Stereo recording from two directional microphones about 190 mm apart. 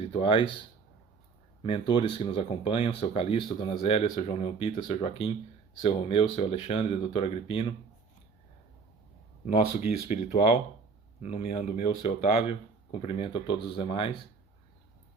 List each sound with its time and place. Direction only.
0.1 s speech: 25° left (ahead or behind)
1.6 s speech: 30° left (ahead or behind)
10.1 s speech: 35° left (ahead or behind)